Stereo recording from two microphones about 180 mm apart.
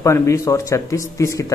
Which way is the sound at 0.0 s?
15° left (ahead or behind).